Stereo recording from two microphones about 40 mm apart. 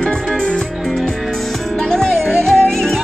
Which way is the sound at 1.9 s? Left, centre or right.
Centre.